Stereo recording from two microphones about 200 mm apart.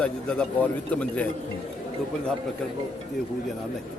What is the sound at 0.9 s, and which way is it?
Speech, 5° left (ahead or behind).